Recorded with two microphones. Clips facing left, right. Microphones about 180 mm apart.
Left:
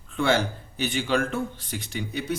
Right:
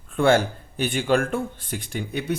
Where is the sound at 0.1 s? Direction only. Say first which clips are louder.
Right 5 dB; 50° right (ahead or behind).